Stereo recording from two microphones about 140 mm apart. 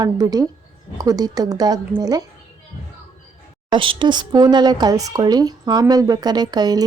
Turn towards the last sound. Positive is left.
turn(degrees=-30)  # may be behind; listen again after turning